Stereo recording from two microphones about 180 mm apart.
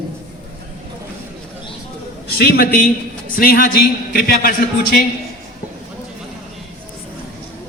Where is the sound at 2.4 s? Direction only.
60° left (ahead or behind).